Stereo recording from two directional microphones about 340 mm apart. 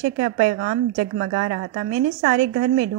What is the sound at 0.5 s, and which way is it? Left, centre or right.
A woman's voice, right.